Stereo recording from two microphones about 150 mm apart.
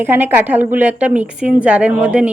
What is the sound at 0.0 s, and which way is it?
Speech, 15° right (ahead or behind).